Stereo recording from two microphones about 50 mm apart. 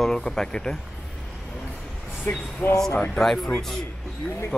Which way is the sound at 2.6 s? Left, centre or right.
Left.